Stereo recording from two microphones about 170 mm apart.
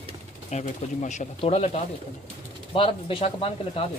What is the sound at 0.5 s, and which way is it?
A man's voice, 45° left (ahead or behind).